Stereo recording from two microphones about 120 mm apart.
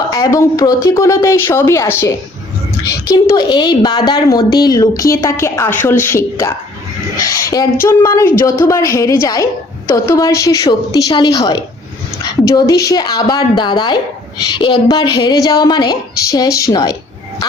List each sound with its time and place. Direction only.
0.1 s a woman's voice: 30° left (ahead or behind)